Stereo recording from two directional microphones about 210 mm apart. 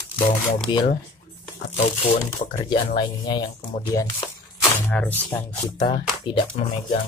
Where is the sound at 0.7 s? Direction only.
20° left (ahead or behind).